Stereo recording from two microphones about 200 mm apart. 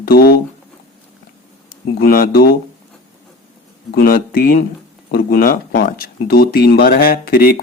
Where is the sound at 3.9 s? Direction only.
45° left (ahead or behind).